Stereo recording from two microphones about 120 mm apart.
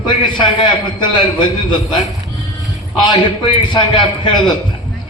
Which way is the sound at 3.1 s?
40° left (ahead or behind).